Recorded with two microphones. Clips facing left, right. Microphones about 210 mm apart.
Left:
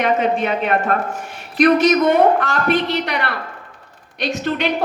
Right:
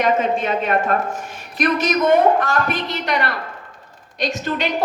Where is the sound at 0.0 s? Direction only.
60° left (ahead or behind).